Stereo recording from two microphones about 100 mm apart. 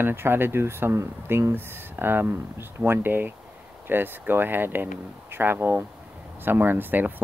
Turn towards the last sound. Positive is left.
turn(degrees=-20)  # may be behind; listen again after turning